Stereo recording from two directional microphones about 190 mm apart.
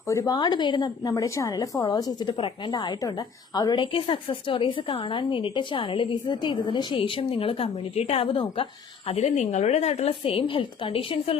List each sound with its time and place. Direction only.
0.1 s a woman's voice: 20° left (ahead or behind)